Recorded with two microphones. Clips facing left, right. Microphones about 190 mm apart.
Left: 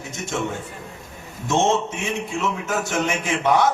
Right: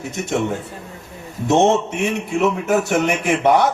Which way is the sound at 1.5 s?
65° right (ahead or behind).